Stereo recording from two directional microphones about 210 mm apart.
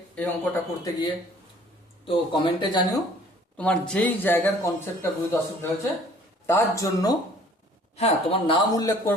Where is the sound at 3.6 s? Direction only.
5° left (ahead or behind).